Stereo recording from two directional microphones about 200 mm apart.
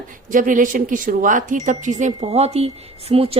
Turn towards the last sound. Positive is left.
turn(degrees=-30)  # may be behind; listen again after turning